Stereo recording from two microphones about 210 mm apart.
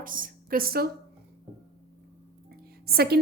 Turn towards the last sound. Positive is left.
turn(degrees=-50)  # may be behind; listen again after turning